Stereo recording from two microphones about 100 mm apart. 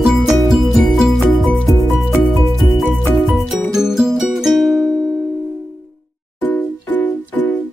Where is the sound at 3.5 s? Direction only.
5° right (ahead or behind).